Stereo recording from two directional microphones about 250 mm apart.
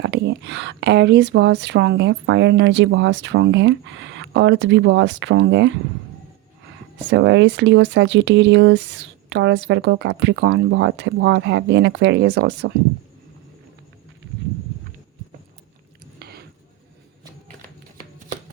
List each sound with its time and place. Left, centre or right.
0.0 s speech: right
7.1 s speech: right
16.1 s a sound: right